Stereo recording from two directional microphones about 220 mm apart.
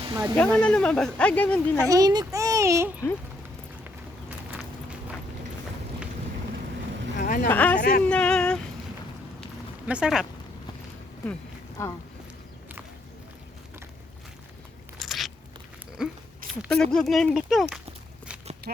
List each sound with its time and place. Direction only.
0.0 s speech: 15° right (ahead or behind)
0.3 s speech: 5° left (ahead or behind)
1.8 s a child's voice: 15° right (ahead or behind)
7.2 s a sound: 40° left (ahead or behind)
7.4 s speech: 5° left (ahead or behind)
7.8 s speech: 40° left (ahead or behind)
8.0 s a sound: 5° left (ahead or behind)
9.8 s speech: 5° right (ahead or behind)
14.9 s biting: centre (ahead or behind)
16.0 s speech: 5° right (ahead or behind)